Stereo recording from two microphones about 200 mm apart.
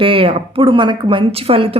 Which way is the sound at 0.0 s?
25° right (ahead or behind).